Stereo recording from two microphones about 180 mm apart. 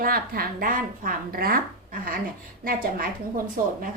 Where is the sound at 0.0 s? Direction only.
55° right (ahead or behind).